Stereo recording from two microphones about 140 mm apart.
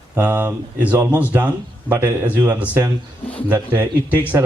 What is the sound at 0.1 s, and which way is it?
A man's voice, 10° right (ahead or behind).